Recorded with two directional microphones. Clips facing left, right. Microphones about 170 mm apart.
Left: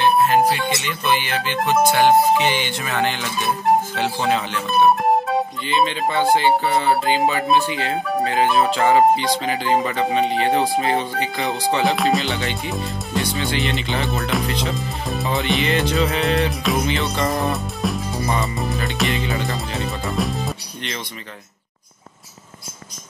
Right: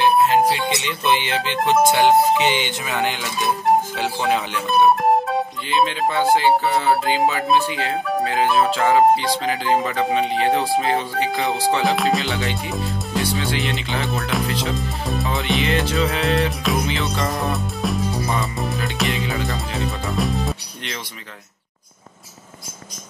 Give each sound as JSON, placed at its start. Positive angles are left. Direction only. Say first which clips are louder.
{"t": 0.0, "sound": "music", "louder": "even", "side_deg": -20}
{"t": 3.9, "sound": "speech", "louder": "even", "side_deg": -5}